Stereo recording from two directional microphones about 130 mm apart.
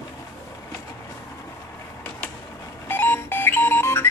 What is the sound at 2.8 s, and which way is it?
Alarm clock, 15° left (ahead or behind).